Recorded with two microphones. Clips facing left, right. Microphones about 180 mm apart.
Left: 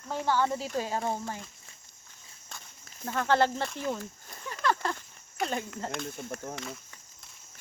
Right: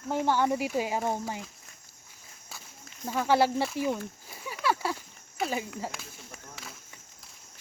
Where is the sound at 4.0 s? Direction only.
5° right (ahead or behind).